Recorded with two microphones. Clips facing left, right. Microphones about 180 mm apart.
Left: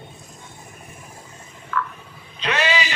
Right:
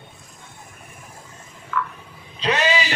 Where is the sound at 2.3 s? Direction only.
35° right (ahead or behind).